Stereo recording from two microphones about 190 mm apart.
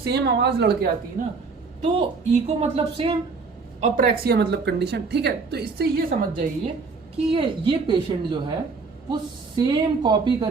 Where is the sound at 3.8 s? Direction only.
40° right (ahead or behind).